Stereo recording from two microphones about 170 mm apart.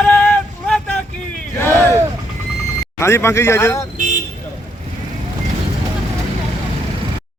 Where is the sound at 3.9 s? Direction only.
50° right (ahead or behind).